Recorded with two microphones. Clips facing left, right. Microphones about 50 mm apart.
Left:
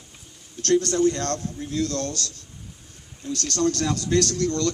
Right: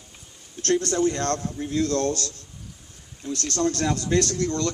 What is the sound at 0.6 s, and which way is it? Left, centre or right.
A man's voice, right.